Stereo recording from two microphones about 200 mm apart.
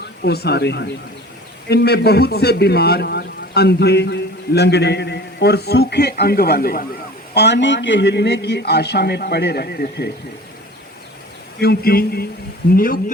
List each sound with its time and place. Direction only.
0.2 s a man's voice: 55° left (ahead or behind)
7.3 s a man's voice: 60° left (ahead or behind)
11.6 s speech: 50° left (ahead or behind)